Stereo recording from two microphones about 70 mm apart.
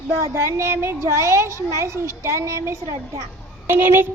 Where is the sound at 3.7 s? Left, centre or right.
Right.